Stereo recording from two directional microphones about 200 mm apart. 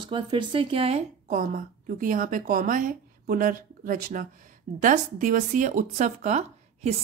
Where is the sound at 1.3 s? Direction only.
45° right (ahead or behind).